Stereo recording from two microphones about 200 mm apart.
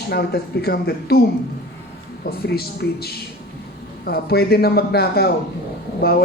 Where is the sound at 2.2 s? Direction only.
50° left (ahead or behind).